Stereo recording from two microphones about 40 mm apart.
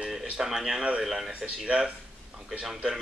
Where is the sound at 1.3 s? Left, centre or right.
Right.